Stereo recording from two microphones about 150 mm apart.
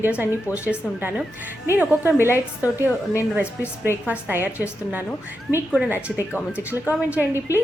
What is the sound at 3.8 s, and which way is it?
Speech, 10° right (ahead or behind).